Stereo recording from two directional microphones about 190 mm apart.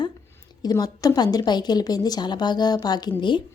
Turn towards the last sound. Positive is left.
turn(degrees=25)  # may be behind; listen again after turning